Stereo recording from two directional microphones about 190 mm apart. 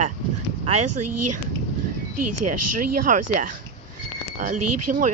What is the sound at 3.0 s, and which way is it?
Speech, 45° right (ahead or behind).